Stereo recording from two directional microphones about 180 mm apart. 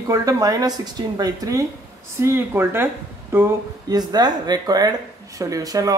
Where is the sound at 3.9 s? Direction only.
25° right (ahead or behind).